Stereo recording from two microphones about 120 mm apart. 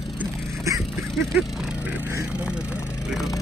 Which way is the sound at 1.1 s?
Centre (ahead or behind).